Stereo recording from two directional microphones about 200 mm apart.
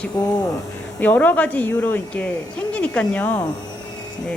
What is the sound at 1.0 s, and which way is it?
A woman's voice, 10° left (ahead or behind).